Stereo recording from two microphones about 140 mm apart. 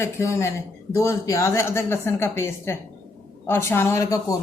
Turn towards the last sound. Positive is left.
turn(degrees=25)  # may be behind; listen again after turning